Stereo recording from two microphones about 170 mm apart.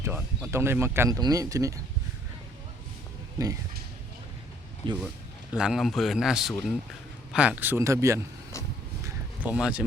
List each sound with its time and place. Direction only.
0.0 s speech: 15° right (ahead or behind)
3.3 s speech: 20° right (ahead or behind)
4.8 s speech: 30° right (ahead or behind)
5.5 s a man's voice: 5° right (ahead or behind)
9.0 s a sound: 10° right (ahead or behind)